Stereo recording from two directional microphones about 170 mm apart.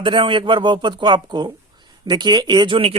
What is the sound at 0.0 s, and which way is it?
Speech, 30° right (ahead or behind).